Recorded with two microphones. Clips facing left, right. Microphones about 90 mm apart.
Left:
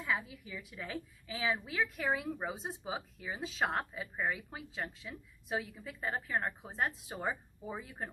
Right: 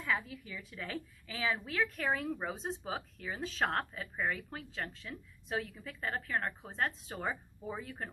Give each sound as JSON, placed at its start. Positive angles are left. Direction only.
{"t": 0.1, "sound": "a woman's voice", "side_deg": 15}